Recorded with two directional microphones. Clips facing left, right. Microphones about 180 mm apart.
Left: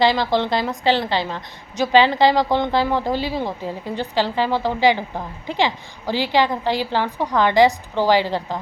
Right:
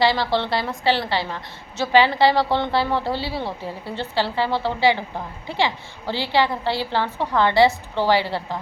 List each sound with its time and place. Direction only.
0.0 s a woman's voice: 20° left (ahead or behind)